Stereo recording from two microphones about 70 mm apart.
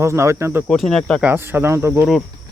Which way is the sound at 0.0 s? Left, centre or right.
Right.